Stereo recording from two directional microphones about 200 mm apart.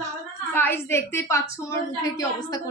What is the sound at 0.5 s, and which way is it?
A woman's voice, 10° left (ahead or behind).